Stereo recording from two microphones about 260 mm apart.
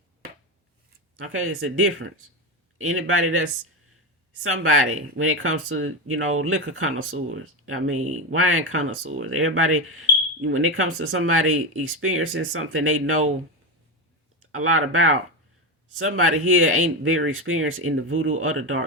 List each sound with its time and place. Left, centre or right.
1.1 s speech: right
4.4 s speech: right
14.5 s speech: right